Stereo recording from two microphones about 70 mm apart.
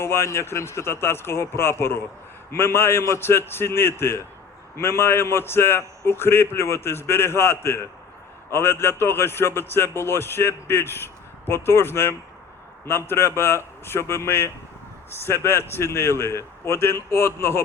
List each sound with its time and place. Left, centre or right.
0.0 s a man's voice: left